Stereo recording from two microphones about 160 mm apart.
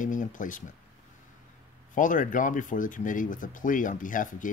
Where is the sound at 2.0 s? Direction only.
55° left (ahead or behind).